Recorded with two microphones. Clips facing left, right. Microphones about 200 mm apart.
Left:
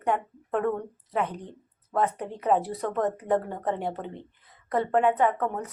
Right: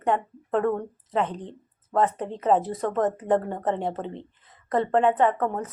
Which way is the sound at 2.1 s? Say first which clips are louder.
Right 3 dB; 25° right (ahead or behind).